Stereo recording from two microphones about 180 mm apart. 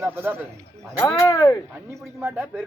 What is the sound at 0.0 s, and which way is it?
Speech, 10° right (ahead or behind).